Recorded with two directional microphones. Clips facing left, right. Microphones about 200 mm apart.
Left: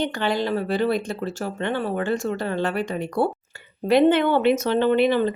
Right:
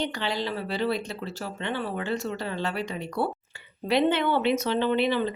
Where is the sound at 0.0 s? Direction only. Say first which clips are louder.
Left 6 dB; 50° left (ahead or behind).